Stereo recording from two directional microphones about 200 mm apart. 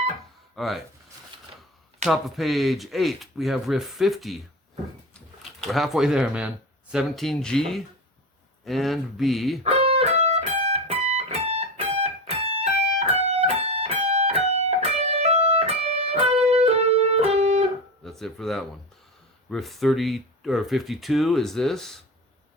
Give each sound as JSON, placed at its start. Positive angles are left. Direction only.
{"t": 0.5, "sound": "speech", "side_deg": 0}
{"t": 2.0, "sound": "speech", "side_deg": 0}
{"t": 9.6, "sound": "music", "side_deg": -30}
{"t": 18.0, "sound": "a sound", "side_deg": 0}
{"t": 19.5, "sound": "speech", "side_deg": 0}